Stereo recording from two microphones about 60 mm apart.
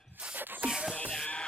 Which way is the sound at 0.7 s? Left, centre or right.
Centre.